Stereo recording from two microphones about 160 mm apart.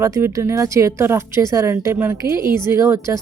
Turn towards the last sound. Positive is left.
turn(degrees=-20)  # may be behind; listen again after turning